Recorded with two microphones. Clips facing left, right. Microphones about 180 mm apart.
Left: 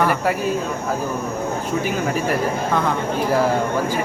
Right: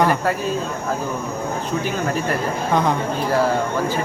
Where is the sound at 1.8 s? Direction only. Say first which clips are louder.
Left 1 dB; 10° left (ahead or behind).